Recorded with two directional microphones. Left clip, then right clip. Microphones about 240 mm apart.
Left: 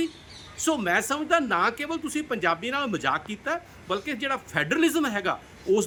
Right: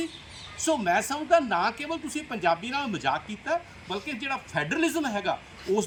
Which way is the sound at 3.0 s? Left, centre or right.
Left.